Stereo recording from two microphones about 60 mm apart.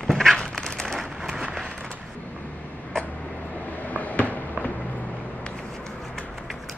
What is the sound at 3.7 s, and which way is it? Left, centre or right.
Fireworks, left.